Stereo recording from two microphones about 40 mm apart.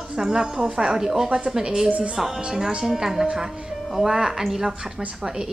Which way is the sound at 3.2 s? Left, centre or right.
Right.